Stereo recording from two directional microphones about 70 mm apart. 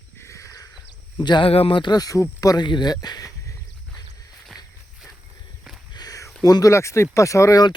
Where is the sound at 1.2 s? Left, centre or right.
Left.